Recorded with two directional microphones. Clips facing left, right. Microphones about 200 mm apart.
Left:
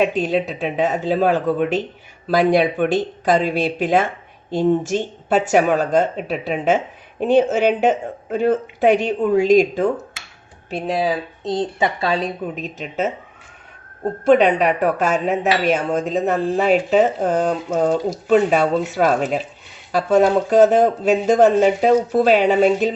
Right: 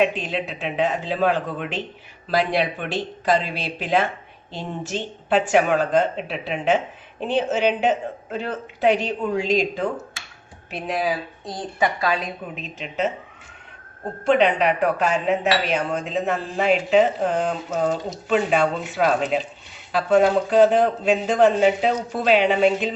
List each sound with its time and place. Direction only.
0.0 s speech: 40° left (ahead or behind)
10.7 s speech: 30° left (ahead or behind); by 13.1 s 45° left (ahead or behind)
14.3 s speech: 45° left (ahead or behind)
20.5 s speech: 45° left (ahead or behind)